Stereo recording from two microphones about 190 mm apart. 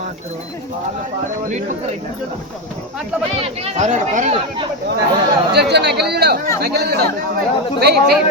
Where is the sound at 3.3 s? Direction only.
30° right (ahead or behind).